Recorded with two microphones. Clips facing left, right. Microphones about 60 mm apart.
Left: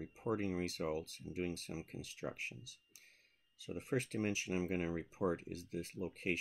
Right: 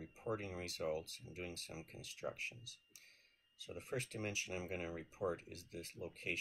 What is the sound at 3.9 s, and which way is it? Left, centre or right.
Speech, left.